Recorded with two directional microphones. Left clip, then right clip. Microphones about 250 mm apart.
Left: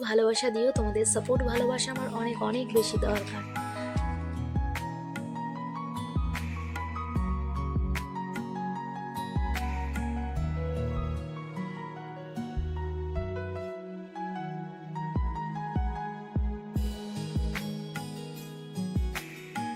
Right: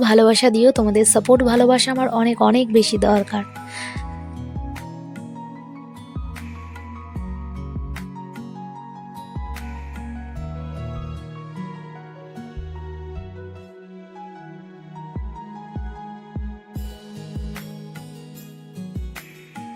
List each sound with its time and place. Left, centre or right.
0.0 s speech: right
5.1 s music: centre
8.4 s music: centre
9.9 s music: centre